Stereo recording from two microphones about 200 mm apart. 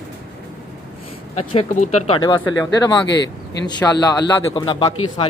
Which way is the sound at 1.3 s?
35° left (ahead or behind).